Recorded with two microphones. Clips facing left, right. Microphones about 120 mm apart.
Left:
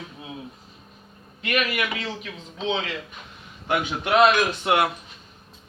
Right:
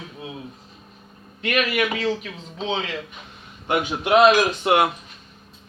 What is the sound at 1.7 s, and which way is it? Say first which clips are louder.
Speech: right 5 dB; 40° right (ahead or behind).